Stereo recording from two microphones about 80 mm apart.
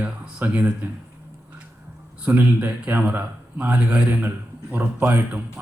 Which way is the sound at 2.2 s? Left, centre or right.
Centre.